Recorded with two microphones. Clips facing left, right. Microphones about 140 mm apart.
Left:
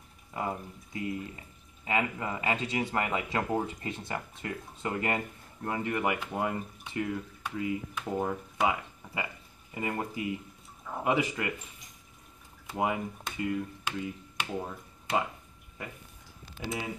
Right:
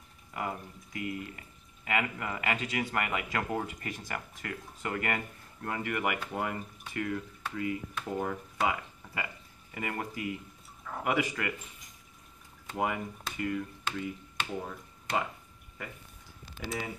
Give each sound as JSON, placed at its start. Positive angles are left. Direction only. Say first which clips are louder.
{"t": 0.3, "sound": "speech", "louder": "left 2 dB", "side_deg": 25}
{"t": 12.7, "sound": "speech", "louder": "left 2 dB", "side_deg": 20}
{"t": 16.6, "sound": "speech", "louder": "left 2 dB", "side_deg": 20}